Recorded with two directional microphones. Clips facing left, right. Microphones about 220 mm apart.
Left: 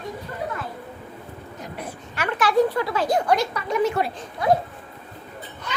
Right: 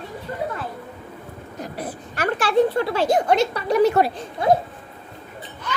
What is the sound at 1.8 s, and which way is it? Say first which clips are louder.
A woman's voice: right 4 dB; 35° right (ahead or behind).